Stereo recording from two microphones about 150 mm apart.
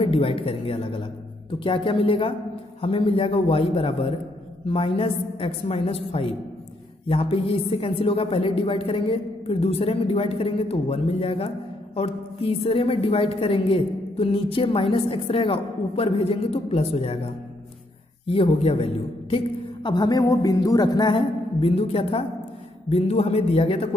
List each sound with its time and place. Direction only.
0.0 s a woman's voice: 35° left (ahead or behind)